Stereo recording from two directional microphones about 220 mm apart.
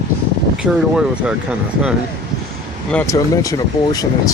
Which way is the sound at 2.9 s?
10° left (ahead or behind).